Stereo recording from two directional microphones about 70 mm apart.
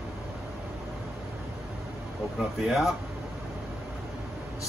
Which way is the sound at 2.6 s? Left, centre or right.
Centre.